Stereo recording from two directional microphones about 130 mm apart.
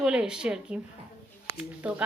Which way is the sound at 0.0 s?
5° right (ahead or behind).